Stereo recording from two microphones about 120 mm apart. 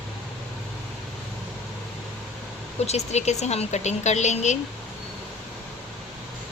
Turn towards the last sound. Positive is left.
turn(degrees=75)  # may be behind; listen again after turning